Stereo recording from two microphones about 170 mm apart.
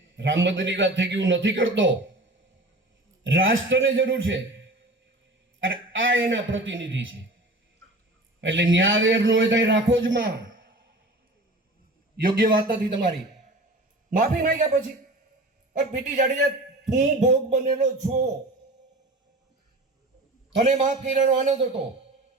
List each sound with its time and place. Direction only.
0.2 s a man's voice: 90° right
3.2 s a man's voice: 90° right
8.4 s a man's voice: 90° right
12.4 s speech: 55° right (ahead or behind)
14.2 s a man's voice: 50° right (ahead or behind)
16.0 s a man's voice: 45° right (ahead or behind)
20.7 s a man's voice: 45° right (ahead or behind)